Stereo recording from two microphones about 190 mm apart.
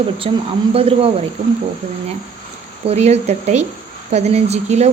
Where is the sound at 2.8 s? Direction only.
35° right (ahead or behind).